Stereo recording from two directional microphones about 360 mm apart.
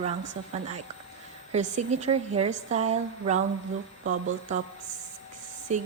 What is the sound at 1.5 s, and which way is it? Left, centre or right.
A woman's voice, centre.